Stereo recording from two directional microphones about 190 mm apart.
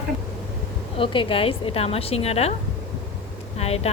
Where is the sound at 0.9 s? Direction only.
25° left (ahead or behind).